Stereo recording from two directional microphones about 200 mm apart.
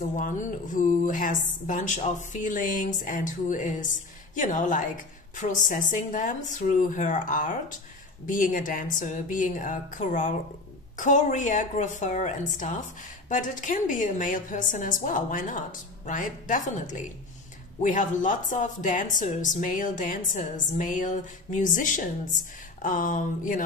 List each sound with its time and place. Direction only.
0.7 s a woman's voice: 40° left (ahead or behind)